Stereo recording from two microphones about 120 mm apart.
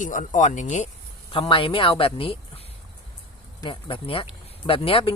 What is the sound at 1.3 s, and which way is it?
Speech, 45° left (ahead or behind).